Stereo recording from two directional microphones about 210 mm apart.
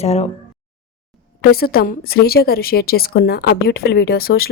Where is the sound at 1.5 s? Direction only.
45° left (ahead or behind).